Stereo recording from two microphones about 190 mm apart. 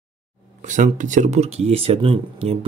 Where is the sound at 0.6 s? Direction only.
40° right (ahead or behind).